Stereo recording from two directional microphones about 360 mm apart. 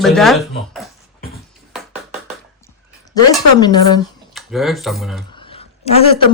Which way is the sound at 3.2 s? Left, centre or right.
Centre.